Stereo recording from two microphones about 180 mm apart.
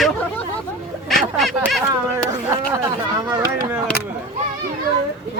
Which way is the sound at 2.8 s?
20° right (ahead or behind).